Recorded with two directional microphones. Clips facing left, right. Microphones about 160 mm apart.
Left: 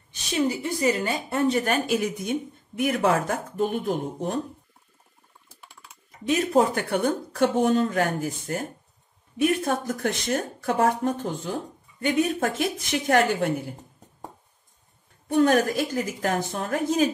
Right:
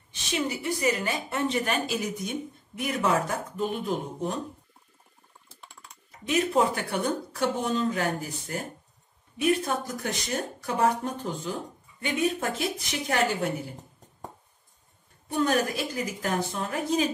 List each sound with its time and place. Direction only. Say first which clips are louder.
0.1 s a woman's voice: left 5 dB; 35° left (ahead or behind); by 4.4 s 50° left (ahead or behind)
5.5 s typing: even; 5° left (ahead or behind)
6.2 s a woman's voice: left 3 dB; 40° left (ahead or behind)
6.8 s speech: left 4 dB; 55° left (ahead or behind)
15.2 s speech: left 5 dB; 55° left (ahead or behind)